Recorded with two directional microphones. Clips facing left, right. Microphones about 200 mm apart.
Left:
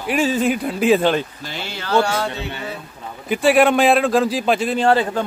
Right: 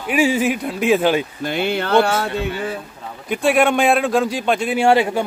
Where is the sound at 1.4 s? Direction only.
55° right (ahead or behind).